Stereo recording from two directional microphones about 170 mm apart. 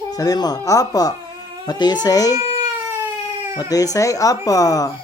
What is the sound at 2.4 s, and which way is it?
Crying, 15° right (ahead or behind).